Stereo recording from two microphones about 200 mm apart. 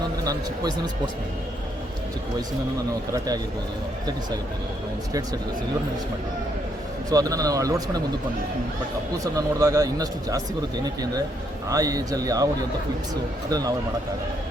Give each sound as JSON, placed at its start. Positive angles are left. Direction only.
{"t": 0.3, "sound": "speech", "side_deg": -20}
{"t": 3.1, "sound": "speech", "side_deg": -20}
{"t": 7.1, "sound": "speech", "side_deg": -15}
{"t": 9.1, "sound": "speech", "side_deg": -15}
{"t": 11.7, "sound": "speech", "side_deg": -15}
{"t": 13.5, "sound": "speech", "side_deg": -20}